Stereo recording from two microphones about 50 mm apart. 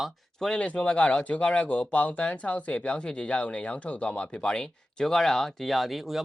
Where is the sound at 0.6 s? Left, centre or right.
Left.